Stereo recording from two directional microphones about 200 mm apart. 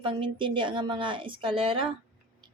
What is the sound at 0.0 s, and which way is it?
A woman's voice, 25° right (ahead or behind).